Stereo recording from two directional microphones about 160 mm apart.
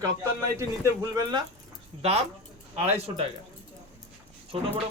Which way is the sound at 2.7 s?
40° right (ahead or behind).